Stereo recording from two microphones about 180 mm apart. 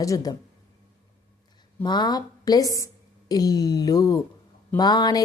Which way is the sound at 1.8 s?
25° left (ahead or behind).